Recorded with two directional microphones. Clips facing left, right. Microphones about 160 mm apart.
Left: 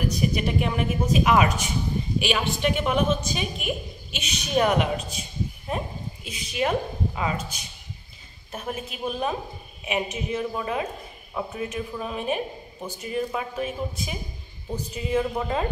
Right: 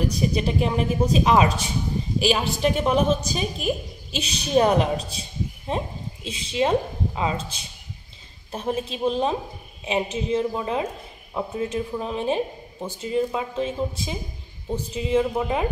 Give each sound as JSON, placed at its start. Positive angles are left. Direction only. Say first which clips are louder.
{"t": 0.2, "sound": "a woman's voice", "louder": "right 1 dB", "side_deg": -30}